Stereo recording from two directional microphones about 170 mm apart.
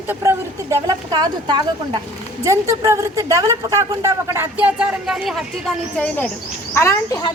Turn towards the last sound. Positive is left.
turn(degrees=15)  # may be behind; listen again after turning